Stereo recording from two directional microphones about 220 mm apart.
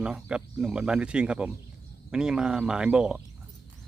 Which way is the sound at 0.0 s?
5° right (ahead or behind).